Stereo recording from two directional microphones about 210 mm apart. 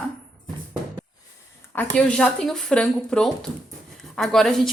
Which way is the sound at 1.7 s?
5° left (ahead or behind).